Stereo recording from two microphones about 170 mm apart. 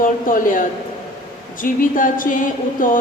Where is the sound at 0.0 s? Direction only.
50° left (ahead or behind).